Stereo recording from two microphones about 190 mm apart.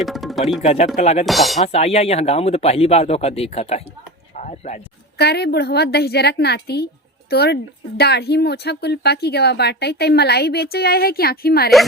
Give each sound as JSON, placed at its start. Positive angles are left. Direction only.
{"t": 0.0, "sound": "music", "side_deg": 0}
{"t": 0.6, "sound": "speech", "side_deg": 35}
{"t": 1.2, "sound": "speech", "side_deg": 0}
{"t": 1.6, "sound": "speech", "side_deg": 30}
{"t": 4.4, "sound": "a sound", "side_deg": 35}
{"t": 5.1, "sound": "speech", "side_deg": 60}